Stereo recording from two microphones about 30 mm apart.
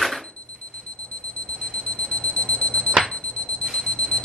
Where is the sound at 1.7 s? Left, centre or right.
Left.